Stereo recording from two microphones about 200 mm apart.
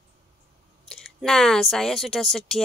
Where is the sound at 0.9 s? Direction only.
Centre (ahead or behind).